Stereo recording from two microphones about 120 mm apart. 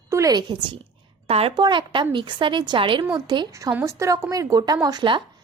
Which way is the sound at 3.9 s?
25° right (ahead or behind).